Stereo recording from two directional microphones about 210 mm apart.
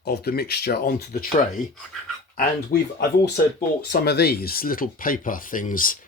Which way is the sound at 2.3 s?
40° left (ahead or behind).